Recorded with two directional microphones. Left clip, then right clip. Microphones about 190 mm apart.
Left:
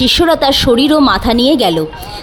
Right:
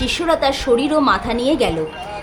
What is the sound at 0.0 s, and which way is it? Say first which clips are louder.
A woman's voice: left 7 dB; 50° left (ahead or behind).